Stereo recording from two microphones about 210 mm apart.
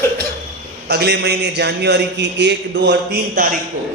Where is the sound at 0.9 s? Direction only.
50° right (ahead or behind).